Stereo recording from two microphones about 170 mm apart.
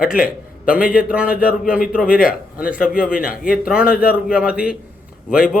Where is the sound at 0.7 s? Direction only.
5° right (ahead or behind).